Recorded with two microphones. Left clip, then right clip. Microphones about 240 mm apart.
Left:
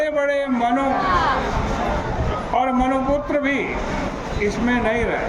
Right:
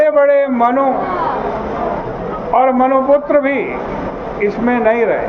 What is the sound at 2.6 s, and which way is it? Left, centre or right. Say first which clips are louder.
Speech: right 9 dB; left.